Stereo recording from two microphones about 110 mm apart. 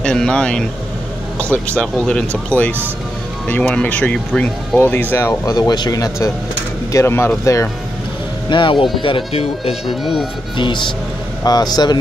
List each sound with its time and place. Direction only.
0.0 s speech: 5° left (ahead or behind); by 7.6 s 25° left (ahead or behind)
8.5 s speech: 45° left (ahead or behind)
9.8 s speech: centre (ahead or behind)
10.6 s speech: 45° left (ahead or behind)